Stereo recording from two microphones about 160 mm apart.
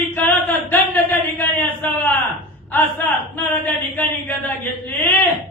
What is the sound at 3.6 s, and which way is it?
Speech, 10° left (ahead or behind).